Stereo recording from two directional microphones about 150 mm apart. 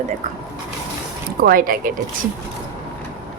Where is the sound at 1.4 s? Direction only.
75° right (ahead or behind).